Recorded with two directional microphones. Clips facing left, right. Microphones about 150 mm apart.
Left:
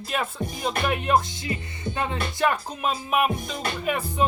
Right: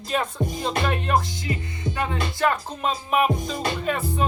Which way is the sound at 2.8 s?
5° left (ahead or behind).